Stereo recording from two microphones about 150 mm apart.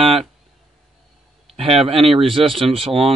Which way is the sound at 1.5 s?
40° right (ahead or behind).